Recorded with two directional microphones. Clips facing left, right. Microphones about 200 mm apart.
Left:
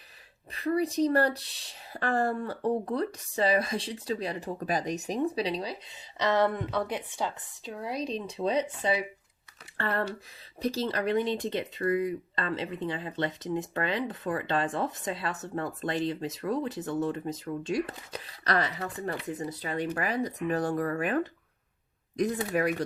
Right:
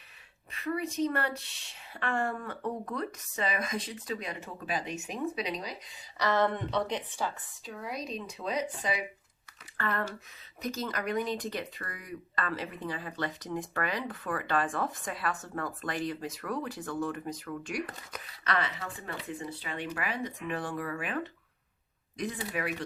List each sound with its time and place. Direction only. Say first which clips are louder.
0.5 s speech: left 6 dB; 35° left (ahead or behind); by 6.5 s 20° left (ahead or behind)
6.6 s speech: left 1 dB; 5° left (ahead or behind)
7.2 s speech: left 2 dB; 25° left (ahead or behind); by 22.7 s 45° left (ahead or behind)